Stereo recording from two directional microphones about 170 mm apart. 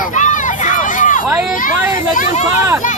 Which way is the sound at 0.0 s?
50° left (ahead or behind).